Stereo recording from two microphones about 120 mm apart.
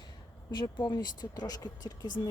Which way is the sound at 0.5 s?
35° left (ahead or behind).